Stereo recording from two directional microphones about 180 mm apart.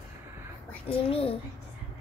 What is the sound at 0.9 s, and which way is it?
Speech, 30° left (ahead or behind).